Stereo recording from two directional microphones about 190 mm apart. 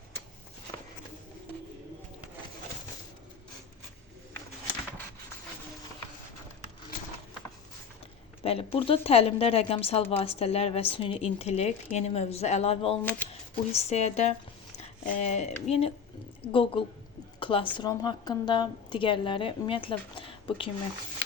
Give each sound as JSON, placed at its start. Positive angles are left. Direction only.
{"t": 8.4, "sound": "a woman's voice", "side_deg": 30}
{"t": 13.0, "sound": "speech", "side_deg": 10}
{"t": 13.7, "sound": "a woman's voice", "side_deg": 35}